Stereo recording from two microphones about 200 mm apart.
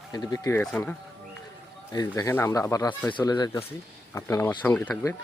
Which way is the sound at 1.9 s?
20° left (ahead or behind).